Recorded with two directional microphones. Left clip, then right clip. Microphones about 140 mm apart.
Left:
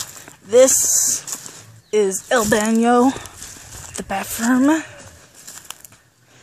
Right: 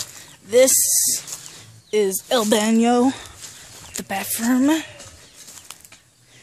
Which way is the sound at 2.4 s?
20° right (ahead or behind).